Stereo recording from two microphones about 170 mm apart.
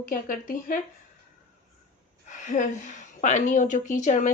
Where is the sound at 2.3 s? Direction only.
50° left (ahead or behind).